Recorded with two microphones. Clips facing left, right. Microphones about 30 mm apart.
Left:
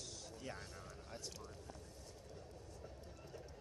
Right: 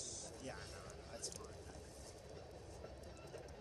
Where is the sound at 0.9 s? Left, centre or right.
Centre.